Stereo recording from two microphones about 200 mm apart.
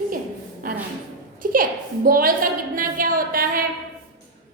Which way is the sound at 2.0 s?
45° right (ahead or behind).